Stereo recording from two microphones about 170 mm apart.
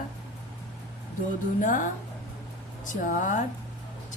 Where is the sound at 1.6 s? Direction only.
50° left (ahead or behind).